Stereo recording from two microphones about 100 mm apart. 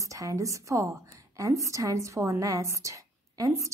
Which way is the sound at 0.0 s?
35° right (ahead or behind).